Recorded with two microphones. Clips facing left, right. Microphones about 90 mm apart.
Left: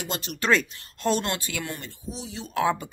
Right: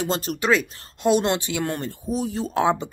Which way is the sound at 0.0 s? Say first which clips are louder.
Right 8 dB; 40° right (ahead or behind).